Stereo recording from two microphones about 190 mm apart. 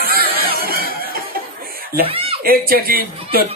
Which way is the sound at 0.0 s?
50° right (ahead or behind).